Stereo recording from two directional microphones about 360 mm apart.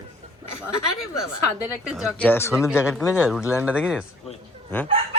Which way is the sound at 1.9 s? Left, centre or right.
Centre.